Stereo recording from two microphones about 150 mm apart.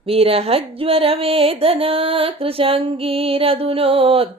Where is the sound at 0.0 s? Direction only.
40° right (ahead or behind).